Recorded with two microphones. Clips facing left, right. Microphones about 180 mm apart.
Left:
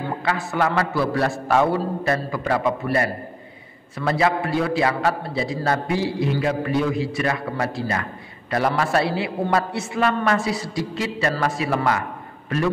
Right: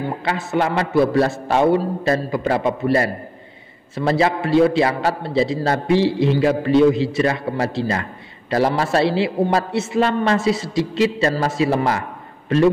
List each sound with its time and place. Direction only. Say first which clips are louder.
0.2 s a man's voice: right 1 dB; 25° right (ahead or behind)